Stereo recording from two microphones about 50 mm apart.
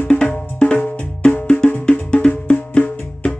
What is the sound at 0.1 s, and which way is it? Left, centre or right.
Music, left.